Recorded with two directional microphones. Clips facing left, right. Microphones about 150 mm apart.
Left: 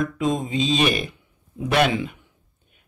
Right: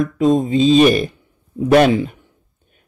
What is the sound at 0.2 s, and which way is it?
Speech, 35° right (ahead or behind).